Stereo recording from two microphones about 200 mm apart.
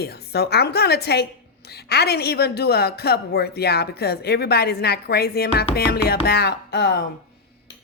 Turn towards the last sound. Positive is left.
turn(degrees=55)  # may be behind; listen again after turning